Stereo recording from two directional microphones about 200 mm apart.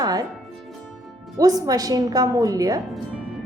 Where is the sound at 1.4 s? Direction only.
20° right (ahead or behind).